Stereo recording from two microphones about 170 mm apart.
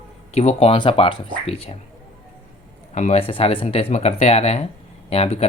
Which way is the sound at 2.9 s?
40° left (ahead or behind).